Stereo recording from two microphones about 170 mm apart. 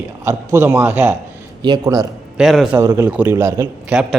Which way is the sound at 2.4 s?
Centre (ahead or behind).